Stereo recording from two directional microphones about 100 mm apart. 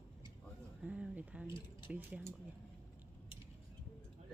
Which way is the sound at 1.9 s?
15° right (ahead or behind).